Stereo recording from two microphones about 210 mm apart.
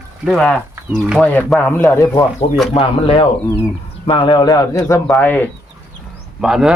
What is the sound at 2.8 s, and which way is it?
A man's voice, 25° left (ahead or behind).